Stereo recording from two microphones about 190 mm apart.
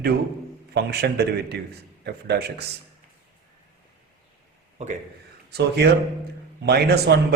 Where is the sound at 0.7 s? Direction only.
60° right (ahead or behind).